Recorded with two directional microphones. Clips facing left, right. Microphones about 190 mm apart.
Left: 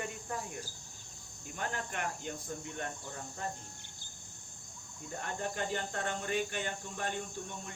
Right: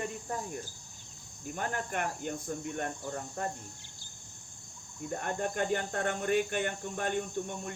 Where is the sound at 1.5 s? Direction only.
50° right (ahead or behind).